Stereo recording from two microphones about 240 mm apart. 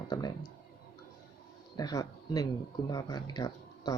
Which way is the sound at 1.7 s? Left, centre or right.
Centre.